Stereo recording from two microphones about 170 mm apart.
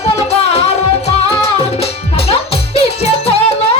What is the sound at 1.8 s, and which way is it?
Music, 35° left (ahead or behind).